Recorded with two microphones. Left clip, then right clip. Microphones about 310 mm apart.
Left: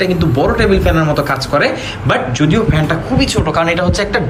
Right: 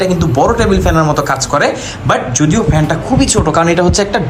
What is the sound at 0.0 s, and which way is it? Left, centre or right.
A man's voice, centre.